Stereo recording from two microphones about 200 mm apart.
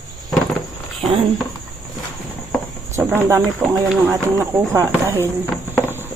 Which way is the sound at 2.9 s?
15° right (ahead or behind).